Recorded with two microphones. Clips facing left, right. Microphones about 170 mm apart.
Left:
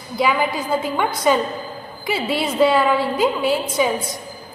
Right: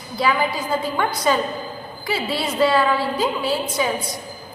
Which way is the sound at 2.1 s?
15° left (ahead or behind).